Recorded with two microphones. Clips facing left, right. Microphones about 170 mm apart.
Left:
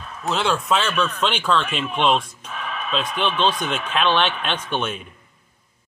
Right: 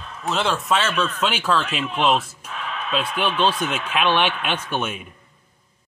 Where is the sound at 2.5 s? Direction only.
10° left (ahead or behind).